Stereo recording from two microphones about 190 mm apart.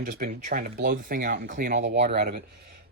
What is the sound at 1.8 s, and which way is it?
Speech, 65° right (ahead or behind).